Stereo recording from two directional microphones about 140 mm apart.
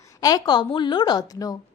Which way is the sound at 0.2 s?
25° left (ahead or behind).